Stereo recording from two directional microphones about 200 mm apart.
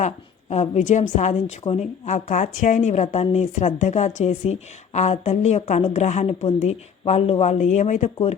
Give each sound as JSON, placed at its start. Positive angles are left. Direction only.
{"t": 0.5, "sound": "a woman's voice", "side_deg": 35}